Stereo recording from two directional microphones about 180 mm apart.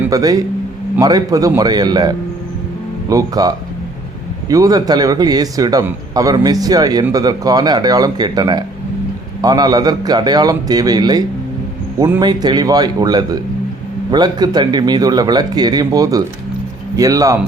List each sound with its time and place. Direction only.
0.1 s a man's voice: 20° right (ahead or behind)